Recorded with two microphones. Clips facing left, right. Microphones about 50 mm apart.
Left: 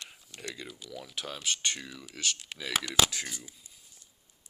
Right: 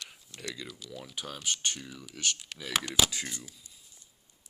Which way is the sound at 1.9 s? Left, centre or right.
Centre.